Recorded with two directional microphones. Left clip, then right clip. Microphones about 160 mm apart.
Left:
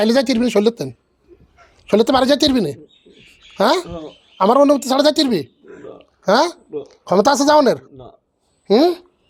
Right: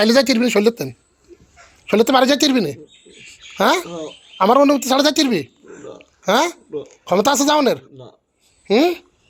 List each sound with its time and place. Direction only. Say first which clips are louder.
0.0 s speech: right 1 dB; 10° left (ahead or behind); by 9.0 s 25° left (ahead or behind)